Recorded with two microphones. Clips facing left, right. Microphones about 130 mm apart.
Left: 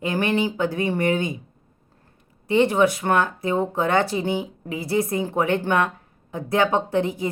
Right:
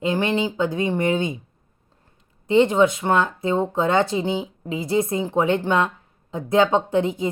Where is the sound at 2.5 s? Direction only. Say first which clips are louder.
Right 2 dB; 20° right (ahead or behind).